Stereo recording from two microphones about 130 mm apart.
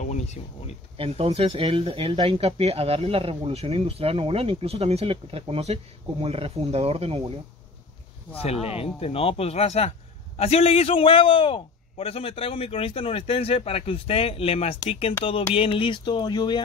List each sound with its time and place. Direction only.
0.0 s a sound: 65° left (ahead or behind)
0.9 s speech: 45° right (ahead or behind)
8.4 s a man's voice: 50° left (ahead or behind); by 16.6 s 35° left (ahead or behind)